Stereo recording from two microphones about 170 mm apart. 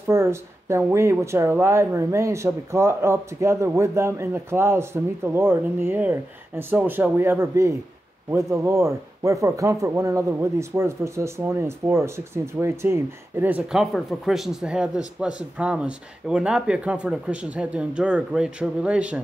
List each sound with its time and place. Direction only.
0.1 s speech: 15° right (ahead or behind)